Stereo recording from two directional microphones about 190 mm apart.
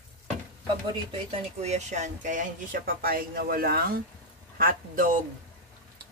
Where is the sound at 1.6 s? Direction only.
35° right (ahead or behind).